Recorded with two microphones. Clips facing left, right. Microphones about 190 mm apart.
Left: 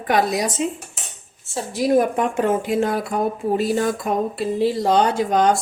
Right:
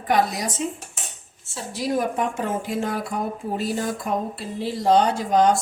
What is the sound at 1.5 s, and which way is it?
Speech, 55° left (ahead or behind).